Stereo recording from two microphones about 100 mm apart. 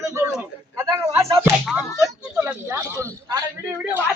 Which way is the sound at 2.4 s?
25° right (ahead or behind).